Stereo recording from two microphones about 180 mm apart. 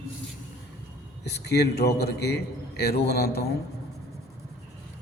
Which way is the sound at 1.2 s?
65° left (ahead or behind).